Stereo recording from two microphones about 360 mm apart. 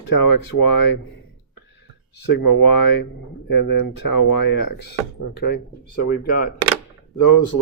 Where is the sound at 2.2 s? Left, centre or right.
Left.